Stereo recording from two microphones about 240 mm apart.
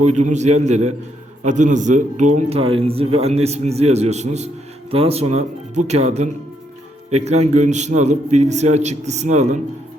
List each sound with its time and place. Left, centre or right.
0.0 s a man's voice: right